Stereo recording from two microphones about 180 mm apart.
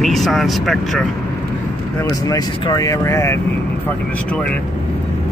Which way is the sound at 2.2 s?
20° left (ahead or behind).